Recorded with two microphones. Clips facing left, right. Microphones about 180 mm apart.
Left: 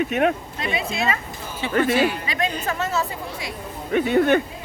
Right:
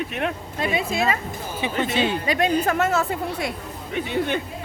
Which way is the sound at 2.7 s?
60° right (ahead or behind).